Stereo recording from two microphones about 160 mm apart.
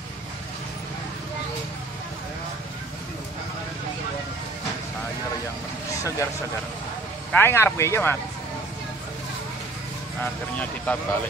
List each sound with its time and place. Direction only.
7.3 s speech: 15° left (ahead or behind)
10.2 s speech: 10° left (ahead or behind)